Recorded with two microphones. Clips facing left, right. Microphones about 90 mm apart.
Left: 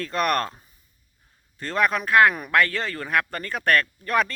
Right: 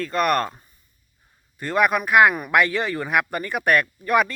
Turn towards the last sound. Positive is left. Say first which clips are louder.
# right 3 dB
turn(degrees=-10)  # may be behind; listen again after turning